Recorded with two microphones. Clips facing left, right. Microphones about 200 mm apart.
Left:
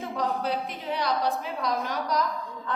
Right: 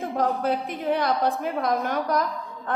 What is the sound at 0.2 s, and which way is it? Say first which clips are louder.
A woman's voice: right 4 dB; 50° right (ahead or behind).